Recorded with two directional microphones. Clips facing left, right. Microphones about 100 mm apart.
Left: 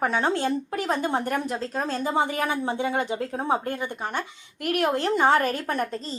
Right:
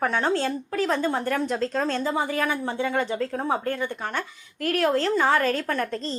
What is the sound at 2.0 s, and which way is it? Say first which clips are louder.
A woman's voice: even; 20° left (ahead or behind).